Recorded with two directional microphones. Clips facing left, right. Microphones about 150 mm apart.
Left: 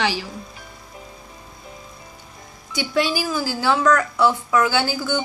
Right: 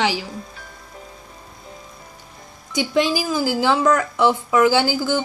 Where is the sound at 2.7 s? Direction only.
20° right (ahead or behind).